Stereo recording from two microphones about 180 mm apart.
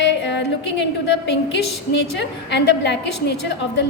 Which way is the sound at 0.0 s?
80° left.